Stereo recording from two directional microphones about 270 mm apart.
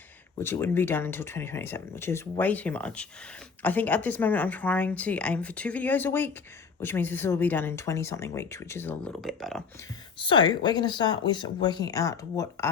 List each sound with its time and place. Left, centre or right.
0.3 s a woman's voice: centre
10.2 s a woman's voice: centre